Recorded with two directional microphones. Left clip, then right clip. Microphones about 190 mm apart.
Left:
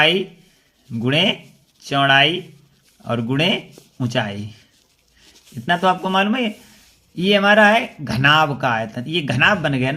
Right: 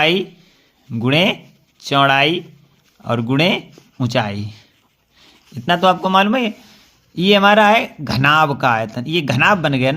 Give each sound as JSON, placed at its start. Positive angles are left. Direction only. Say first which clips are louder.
{"t": 0.0, "sound": "speech", "louder": "even", "side_deg": -30}
{"t": 5.6, "sound": "speech", "louder": "right 3 dB", "side_deg": -35}